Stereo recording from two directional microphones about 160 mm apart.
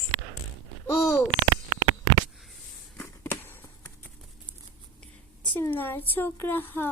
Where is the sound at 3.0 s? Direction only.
10° left (ahead or behind).